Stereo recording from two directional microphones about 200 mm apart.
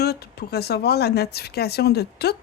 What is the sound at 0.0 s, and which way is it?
Speech, 55° left (ahead or behind).